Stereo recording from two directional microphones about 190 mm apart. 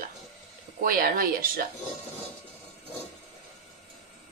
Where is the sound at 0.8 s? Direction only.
50° right (ahead or behind).